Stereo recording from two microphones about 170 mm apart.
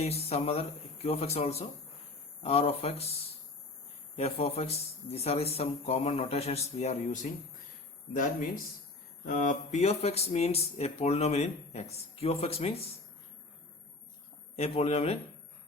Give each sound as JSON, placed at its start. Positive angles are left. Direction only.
{"t": 0.0, "sound": "speech", "side_deg": 35}
{"t": 4.2, "sound": "speech", "side_deg": 35}
{"t": 14.5, "sound": "speech", "side_deg": 35}